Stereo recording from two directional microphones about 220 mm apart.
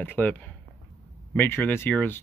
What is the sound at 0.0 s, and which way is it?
Speech, 10° left (ahead or behind).